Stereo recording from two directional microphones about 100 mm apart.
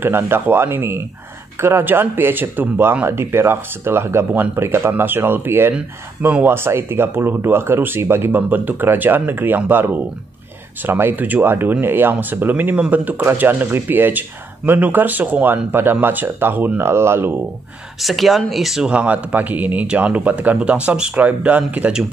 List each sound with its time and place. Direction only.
0.0 s speech: 20° right (ahead or behind)
18.0 s speech: centre (ahead or behind)